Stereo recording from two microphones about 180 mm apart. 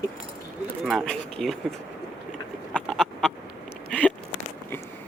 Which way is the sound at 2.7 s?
Centre (ahead or behind).